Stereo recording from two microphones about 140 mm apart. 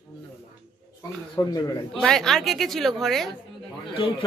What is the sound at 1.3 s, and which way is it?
Speech, 30° left (ahead or behind).